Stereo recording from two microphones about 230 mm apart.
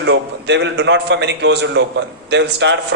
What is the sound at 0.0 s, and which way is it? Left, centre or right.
A man's voice, right.